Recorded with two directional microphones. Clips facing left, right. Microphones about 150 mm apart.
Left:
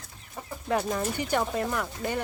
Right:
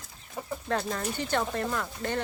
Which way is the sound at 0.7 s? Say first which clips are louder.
Left 4 dB; 15° left (ahead or behind).